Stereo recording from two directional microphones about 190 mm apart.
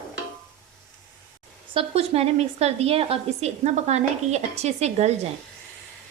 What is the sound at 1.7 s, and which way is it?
A woman's voice, 30° right (ahead or behind).